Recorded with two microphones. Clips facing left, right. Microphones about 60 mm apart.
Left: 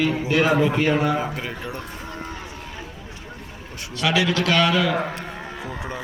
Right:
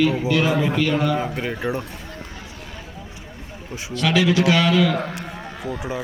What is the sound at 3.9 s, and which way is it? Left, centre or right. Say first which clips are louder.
Speech: right 2 dB; centre.